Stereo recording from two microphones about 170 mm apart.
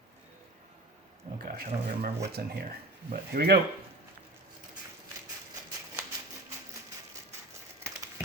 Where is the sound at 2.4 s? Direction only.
60° right (ahead or behind).